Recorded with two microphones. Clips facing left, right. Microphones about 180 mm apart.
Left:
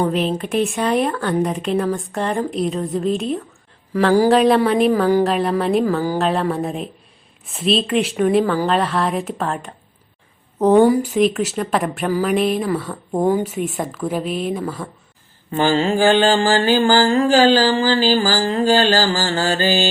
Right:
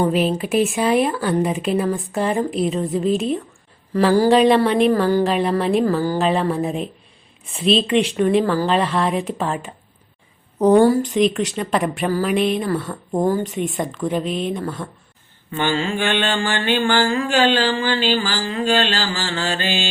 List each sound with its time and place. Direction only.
0.0 s a woman's voice: 5° right (ahead or behind)
10.8 s a woman's voice: 10° left (ahead or behind)
15.5 s mantra: 35° left (ahead or behind)